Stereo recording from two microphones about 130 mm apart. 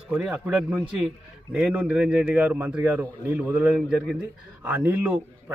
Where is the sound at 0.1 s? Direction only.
10° right (ahead or behind).